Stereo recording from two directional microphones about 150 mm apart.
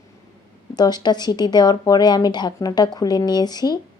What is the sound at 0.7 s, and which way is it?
Speech, 25° left (ahead or behind).